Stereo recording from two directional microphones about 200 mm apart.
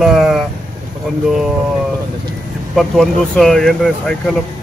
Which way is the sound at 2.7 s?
Centre (ahead or behind).